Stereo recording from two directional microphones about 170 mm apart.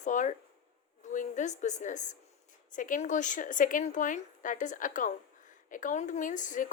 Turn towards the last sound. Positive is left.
turn(degrees=50)  # may be behind; listen again after turning